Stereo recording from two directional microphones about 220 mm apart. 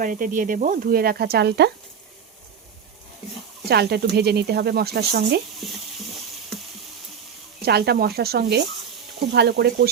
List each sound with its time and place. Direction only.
0.0 s speech: 40° right (ahead or behind)
3.7 s speech: 45° right (ahead or behind)
5.6 s speech: centre (ahead or behind)
7.6 s speech: 45° right (ahead or behind)